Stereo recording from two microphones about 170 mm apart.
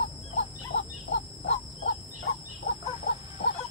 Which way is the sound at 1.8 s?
65° left (ahead or behind).